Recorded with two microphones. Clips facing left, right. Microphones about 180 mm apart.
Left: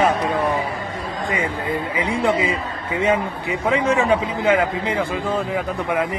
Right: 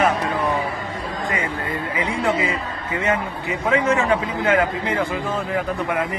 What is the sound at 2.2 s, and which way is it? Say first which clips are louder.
A man's voice: left 2 dB; 15° left (ahead or behind).